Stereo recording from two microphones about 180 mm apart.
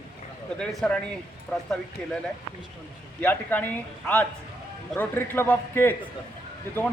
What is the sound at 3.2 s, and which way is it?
Speech, 10° left (ahead or behind).